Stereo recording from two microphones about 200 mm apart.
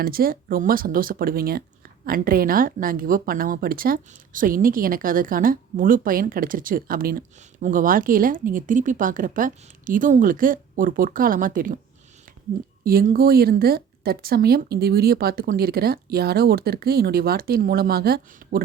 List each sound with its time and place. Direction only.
0.0 s speech: 50° right (ahead or behind)
12.8 s speech: 45° right (ahead or behind)